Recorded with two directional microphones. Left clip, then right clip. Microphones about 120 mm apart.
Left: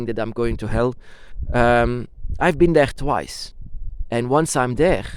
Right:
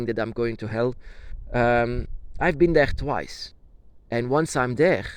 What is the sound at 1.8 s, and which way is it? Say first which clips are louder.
Speech: left 4 dB; 85° left.